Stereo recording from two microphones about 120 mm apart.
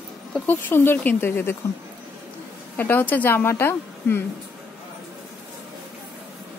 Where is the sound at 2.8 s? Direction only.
15° left (ahead or behind).